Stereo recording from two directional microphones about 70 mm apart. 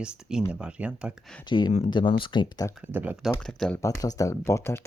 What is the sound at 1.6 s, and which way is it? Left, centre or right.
Speech, left.